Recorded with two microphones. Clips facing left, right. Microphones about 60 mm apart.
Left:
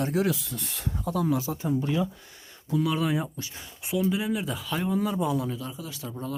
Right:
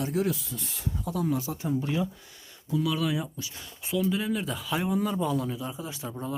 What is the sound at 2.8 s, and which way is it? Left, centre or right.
Speech, left.